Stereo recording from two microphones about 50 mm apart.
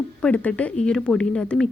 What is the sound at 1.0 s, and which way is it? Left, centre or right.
Speech, centre.